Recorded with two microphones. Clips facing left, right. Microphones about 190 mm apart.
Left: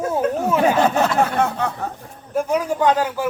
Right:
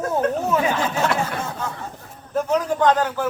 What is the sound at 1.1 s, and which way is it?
Speech, 65° left (ahead or behind).